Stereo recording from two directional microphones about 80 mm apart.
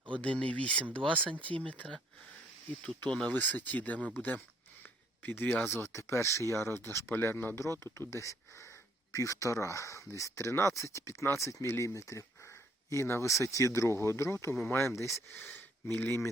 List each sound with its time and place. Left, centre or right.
0.2 s speech: centre
4.8 s a sound: left
5.7 s speech: left
15.4 s speech: left